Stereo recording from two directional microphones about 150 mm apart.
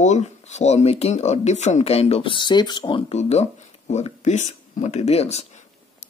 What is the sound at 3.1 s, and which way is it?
Speech, 45° left (ahead or behind).